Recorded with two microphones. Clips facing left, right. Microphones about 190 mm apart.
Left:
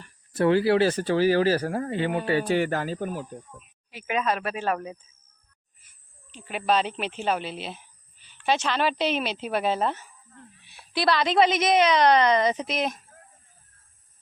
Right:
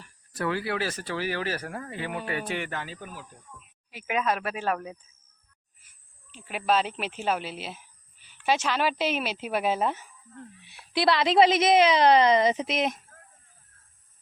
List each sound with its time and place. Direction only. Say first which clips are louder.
0.3 s speech: left 9 dB; 30° left (ahead or behind); by 3.2 s 50° left (ahead or behind)
3.9 s a woman's voice: left 1 dB; 10° right (ahead or behind)
6.3 s a woman's voice: left 1 dB; 5° right (ahead or behind)
10.9 s a woman's voice: right 1 dB; 25° right (ahead or behind)